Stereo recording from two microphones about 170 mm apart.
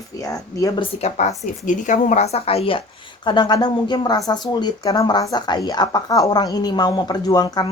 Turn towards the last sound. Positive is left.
turn(degrees=25)  # may be behind; listen again after turning